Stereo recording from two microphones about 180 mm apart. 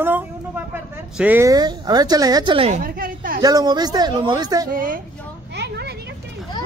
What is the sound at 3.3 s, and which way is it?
A man's voice, 20° right (ahead or behind).